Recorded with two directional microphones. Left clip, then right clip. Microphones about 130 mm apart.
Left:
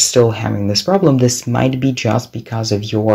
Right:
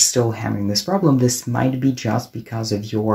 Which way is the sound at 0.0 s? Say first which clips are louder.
Left 6 dB; 20° left (ahead or behind).